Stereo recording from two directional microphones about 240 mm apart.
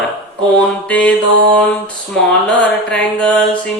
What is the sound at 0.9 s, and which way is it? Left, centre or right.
Mantra, centre.